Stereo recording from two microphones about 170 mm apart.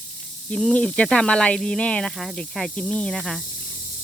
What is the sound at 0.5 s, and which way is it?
Speech, 5° left (ahead or behind).